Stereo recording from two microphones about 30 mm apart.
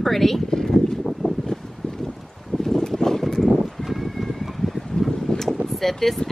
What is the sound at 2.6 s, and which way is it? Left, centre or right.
Boat, centre.